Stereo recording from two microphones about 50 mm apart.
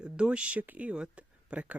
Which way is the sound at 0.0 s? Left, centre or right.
Right.